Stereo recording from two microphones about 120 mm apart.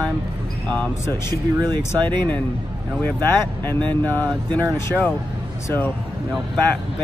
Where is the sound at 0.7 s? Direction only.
10° left (ahead or behind).